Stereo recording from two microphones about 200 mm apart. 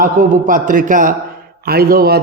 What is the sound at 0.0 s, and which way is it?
A man's voice, 40° right (ahead or behind).